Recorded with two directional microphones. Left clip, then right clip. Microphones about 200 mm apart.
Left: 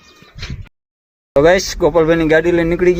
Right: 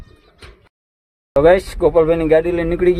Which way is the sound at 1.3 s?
5° left (ahead or behind).